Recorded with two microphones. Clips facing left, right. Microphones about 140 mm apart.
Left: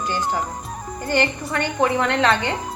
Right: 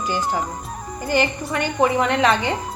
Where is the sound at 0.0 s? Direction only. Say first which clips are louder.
Right 1 dB; 10° right (ahead or behind).